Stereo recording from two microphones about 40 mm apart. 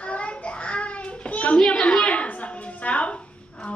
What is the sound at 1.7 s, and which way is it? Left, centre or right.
Speech, left.